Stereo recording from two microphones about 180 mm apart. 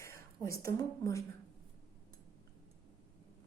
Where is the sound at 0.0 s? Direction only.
15° left (ahead or behind).